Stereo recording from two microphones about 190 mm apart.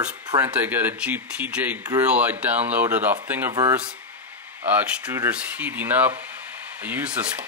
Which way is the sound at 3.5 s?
20° right (ahead or behind).